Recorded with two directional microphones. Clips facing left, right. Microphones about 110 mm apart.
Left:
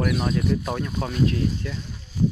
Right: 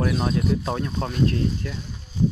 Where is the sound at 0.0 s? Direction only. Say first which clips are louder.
Even; 30° right (ahead or behind).